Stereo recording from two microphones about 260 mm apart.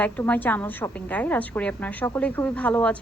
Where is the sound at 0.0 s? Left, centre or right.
Centre.